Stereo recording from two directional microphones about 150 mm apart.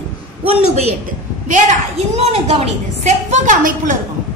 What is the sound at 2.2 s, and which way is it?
A woman's voice, 45° right (ahead or behind).